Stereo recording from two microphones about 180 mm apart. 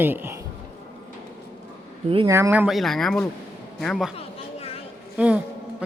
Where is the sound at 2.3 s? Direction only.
15° right (ahead or behind); by 4.1 s centre (ahead or behind).